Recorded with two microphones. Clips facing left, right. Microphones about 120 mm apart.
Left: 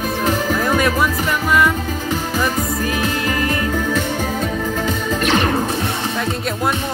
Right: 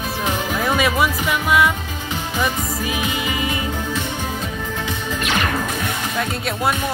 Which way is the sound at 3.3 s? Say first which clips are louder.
Left 4 dB; 10° right (ahead or behind).